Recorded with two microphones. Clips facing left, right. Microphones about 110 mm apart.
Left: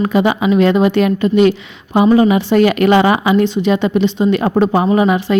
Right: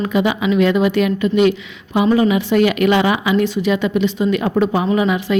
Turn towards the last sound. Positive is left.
turn(degrees=40)  # may be behind; listen again after turning